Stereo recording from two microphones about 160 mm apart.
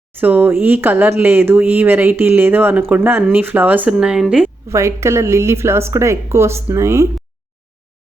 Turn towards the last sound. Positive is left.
turn(degrees=-15)  # may be behind; listen again after turning